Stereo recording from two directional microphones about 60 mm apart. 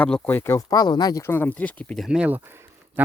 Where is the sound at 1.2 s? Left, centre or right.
Left.